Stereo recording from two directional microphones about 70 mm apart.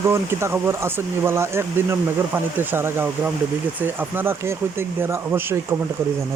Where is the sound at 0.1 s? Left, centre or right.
Right.